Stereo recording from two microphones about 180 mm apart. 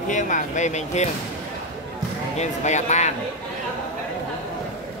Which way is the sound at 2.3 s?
40° left (ahead or behind).